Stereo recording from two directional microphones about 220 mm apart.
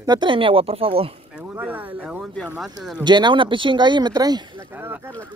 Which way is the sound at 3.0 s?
20° right (ahead or behind).